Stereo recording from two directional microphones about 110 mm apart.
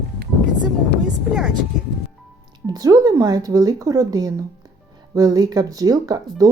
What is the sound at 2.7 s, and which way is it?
A woman's voice, 35° right (ahead or behind).